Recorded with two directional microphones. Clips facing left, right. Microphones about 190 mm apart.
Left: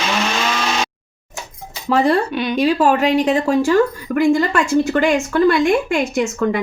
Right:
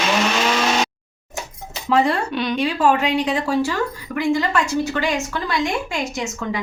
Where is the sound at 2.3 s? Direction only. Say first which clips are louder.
Left 2 dB; 5° left (ahead or behind).